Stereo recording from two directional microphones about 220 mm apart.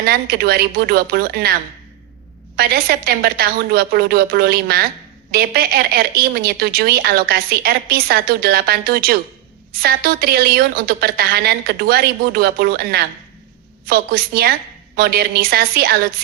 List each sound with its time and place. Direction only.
0.0 s a woman's voice: 45° right (ahead or behind)
2.6 s a woman's voice: 45° right (ahead or behind)